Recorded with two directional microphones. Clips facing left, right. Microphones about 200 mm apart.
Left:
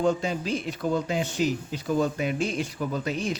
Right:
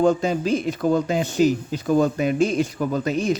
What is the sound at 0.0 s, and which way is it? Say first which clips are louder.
Speech: right 6 dB; 45° right (ahead or behind).